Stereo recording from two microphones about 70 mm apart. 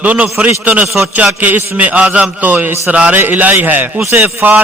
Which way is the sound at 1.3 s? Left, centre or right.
Right.